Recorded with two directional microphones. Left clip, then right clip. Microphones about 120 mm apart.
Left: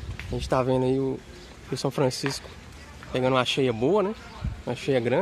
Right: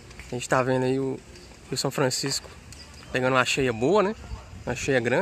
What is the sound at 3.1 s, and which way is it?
Speech, 45° right (ahead or behind).